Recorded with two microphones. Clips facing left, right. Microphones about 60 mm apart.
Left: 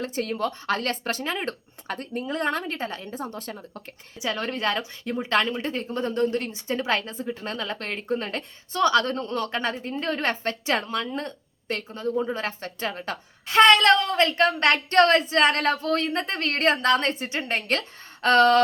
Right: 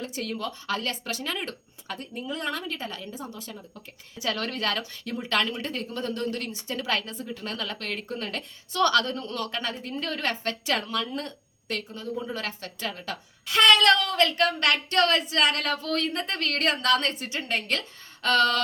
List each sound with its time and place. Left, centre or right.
0.0 s a woman's voice: left
1.2 s a woman's voice: left
4.2 s speech: left
9.0 s a woman's voice: left